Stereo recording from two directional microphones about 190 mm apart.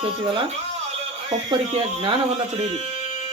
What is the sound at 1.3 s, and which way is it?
Speech, 30° right (ahead or behind).